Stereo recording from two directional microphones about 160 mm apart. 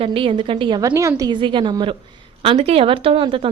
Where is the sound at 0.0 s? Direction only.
35° right (ahead or behind).